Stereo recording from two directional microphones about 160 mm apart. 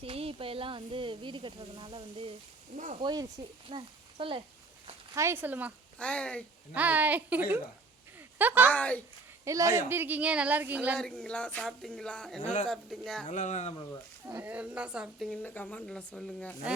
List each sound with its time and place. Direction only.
0.0 s speech: 35° right (ahead or behind)
2.7 s speech: 50° right (ahead or behind)
3.0 s speech: 25° right (ahead or behind)
5.1 s speech: 15° right (ahead or behind)
6.0 s speech: 5° left (ahead or behind)
6.7 s speech: 10° right (ahead or behind)
8.7 s speech: 10° left (ahead or behind)
9.4 s speech: 20° right (ahead or behind)
10.9 s speech: 5° left (ahead or behind)
13.2 s speech: 50° left (ahead or behind)
14.3 s speech: 10° right (ahead or behind); by 16.6 s 5° left (ahead or behind)